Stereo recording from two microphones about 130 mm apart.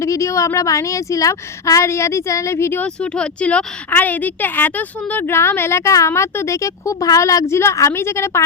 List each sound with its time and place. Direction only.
0.0 s a woman's voice: 25° left (ahead or behind)